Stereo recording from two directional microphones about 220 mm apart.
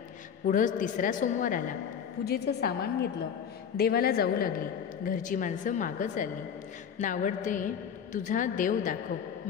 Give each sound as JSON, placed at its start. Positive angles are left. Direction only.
{"t": 0.5, "sound": "a woman's voice", "side_deg": 35}